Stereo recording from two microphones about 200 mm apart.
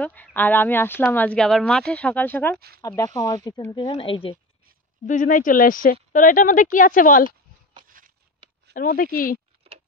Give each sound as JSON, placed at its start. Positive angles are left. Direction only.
{"t": 0.0, "sound": "speech", "side_deg": 10}
{"t": 3.0, "sound": "speech", "side_deg": 20}
{"t": 5.0, "sound": "speech", "side_deg": 40}
{"t": 8.0, "sound": "a sound", "side_deg": -45}
{"t": 8.7, "sound": "speech", "side_deg": 45}